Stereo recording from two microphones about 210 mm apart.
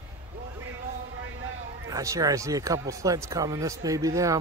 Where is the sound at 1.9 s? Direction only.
15° right (ahead or behind).